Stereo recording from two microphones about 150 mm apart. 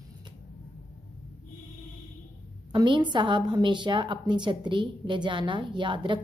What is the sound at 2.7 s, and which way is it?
A woman's voice, 30° right (ahead or behind).